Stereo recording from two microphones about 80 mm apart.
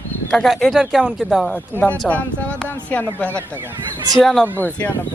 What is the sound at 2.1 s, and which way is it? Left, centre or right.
Speech, centre.